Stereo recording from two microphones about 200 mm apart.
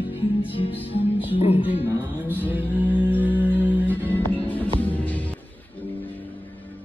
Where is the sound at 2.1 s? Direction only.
10° left (ahead or behind).